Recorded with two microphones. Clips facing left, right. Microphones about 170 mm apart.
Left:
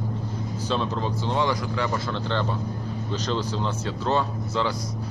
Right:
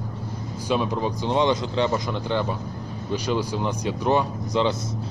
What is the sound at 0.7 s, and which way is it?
Speech, 15° right (ahead or behind).